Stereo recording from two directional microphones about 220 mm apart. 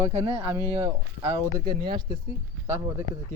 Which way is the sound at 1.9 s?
20° right (ahead or behind).